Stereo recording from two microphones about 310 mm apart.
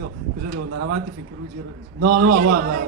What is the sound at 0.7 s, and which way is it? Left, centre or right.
Speech, right.